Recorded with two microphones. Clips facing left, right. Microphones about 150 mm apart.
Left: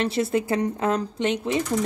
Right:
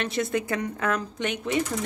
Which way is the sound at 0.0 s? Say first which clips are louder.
Left 4 dB; 30° left (ahead or behind).